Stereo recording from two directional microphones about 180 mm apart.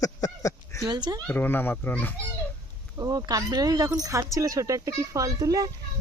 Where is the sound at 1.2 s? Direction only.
10° left (ahead or behind).